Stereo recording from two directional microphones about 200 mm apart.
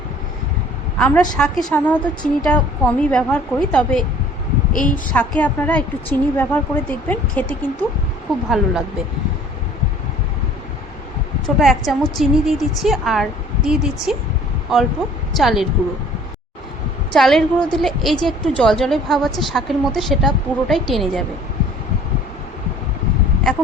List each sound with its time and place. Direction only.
0.9 s a woman's voice: 5° left (ahead or behind)
4.7 s a woman's voice: 40° left (ahead or behind)
5.1 s a woman's voice: 10° left (ahead or behind)
8.4 s a woman's voice: centre (ahead or behind)
11.4 s a woman's voice: centre (ahead or behind)
17.1 s a woman's voice: centre (ahead or behind)